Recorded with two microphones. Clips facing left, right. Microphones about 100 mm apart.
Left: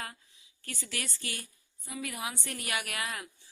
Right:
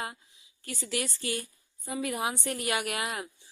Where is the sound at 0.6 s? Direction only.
25° right (ahead or behind).